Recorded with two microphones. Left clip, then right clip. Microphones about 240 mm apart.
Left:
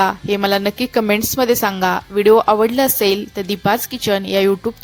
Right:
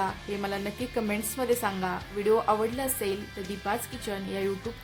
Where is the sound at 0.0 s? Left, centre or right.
Left.